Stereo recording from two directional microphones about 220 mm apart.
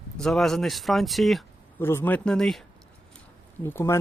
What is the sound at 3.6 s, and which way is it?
Speech, 10° left (ahead or behind).